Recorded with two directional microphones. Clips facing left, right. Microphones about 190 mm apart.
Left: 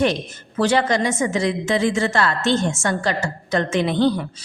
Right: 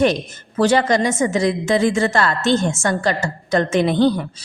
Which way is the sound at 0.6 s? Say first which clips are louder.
Right 3 dB; 40° right (ahead or behind).